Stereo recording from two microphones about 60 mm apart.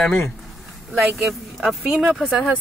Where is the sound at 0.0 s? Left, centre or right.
Centre.